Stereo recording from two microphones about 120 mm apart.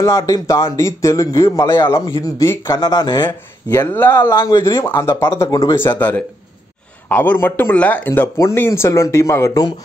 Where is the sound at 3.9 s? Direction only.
15° left (ahead or behind).